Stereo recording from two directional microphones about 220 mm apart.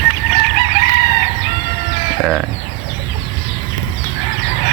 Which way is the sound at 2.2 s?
Centre (ahead or behind).